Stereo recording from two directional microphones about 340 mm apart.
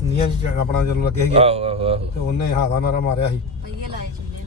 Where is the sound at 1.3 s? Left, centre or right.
Centre.